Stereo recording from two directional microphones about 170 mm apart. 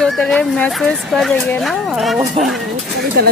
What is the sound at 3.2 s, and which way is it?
Speech, 65° right (ahead or behind).